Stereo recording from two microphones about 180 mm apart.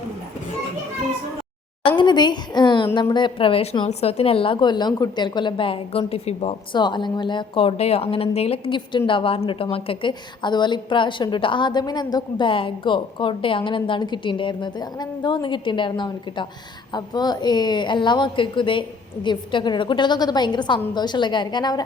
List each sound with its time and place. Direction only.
2.0 s a woman's voice: 25° left (ahead or behind)